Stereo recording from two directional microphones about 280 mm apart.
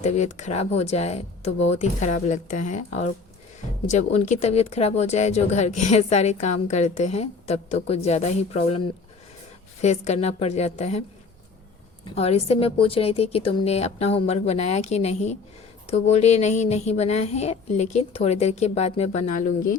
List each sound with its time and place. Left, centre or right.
0.0 s speech: left
9.8 s speech: left
12.1 s speech: left